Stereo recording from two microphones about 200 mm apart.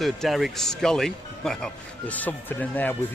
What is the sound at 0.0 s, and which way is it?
Speech, centre (ahead or behind).